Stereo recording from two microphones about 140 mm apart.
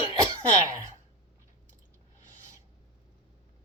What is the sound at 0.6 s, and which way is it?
Speech, 25° right (ahead or behind).